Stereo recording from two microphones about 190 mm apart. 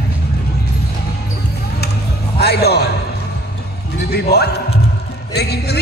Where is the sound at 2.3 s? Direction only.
60° left (ahead or behind).